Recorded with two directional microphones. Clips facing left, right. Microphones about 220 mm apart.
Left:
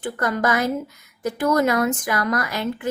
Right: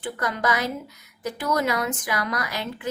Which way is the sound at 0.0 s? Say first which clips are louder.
Left 4 dB; 45° left (ahead or behind).